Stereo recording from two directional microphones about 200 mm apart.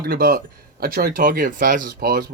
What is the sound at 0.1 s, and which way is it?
Speech, 50° right (ahead or behind).